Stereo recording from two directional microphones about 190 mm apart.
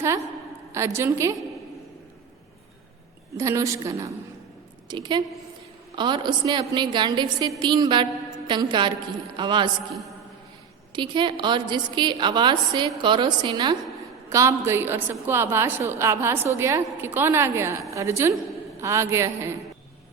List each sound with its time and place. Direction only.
0.7 s a woman's voice: 15° right (ahead or behind)
3.3 s a woman's voice: 15° right (ahead or behind)
10.9 s a woman's voice: 25° right (ahead or behind)